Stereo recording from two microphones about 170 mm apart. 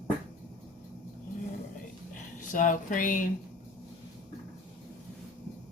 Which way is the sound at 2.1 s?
50° left (ahead or behind).